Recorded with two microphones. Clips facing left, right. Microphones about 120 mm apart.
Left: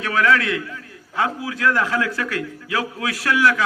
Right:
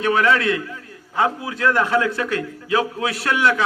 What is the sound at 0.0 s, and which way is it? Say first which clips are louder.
A man's voice: right 1 dB; 20° right (ahead or behind).